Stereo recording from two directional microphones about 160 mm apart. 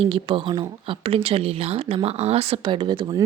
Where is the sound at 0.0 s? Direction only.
30° right (ahead or behind).